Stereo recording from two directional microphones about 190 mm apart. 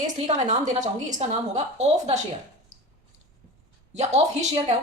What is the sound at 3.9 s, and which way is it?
Speech, 35° right (ahead or behind).